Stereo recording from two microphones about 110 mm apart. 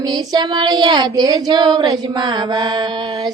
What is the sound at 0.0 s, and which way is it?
Child singing, 40° right (ahead or behind).